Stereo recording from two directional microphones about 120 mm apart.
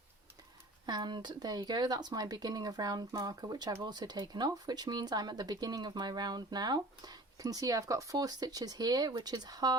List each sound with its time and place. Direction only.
0.9 s speech: 40° right (ahead or behind)